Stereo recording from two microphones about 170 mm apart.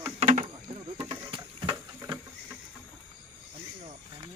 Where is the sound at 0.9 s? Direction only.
30° right (ahead or behind).